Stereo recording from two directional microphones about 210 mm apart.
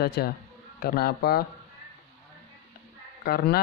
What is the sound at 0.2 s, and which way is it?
Speech, 50° left (ahead or behind).